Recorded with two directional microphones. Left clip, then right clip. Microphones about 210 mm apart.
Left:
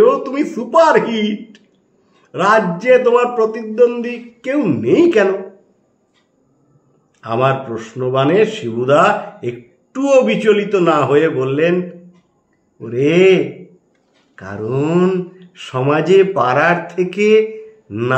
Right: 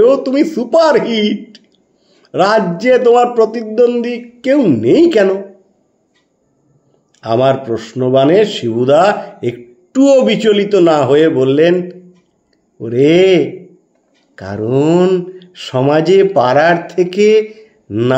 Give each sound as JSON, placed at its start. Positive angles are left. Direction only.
{"t": 0.0, "sound": "a man's voice", "side_deg": -40}
{"t": 7.2, "sound": "speech", "side_deg": -40}
{"t": 12.8, "sound": "speech", "side_deg": -40}